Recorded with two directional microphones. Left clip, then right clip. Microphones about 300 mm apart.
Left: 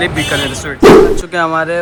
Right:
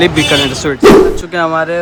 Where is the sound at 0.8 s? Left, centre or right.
Centre.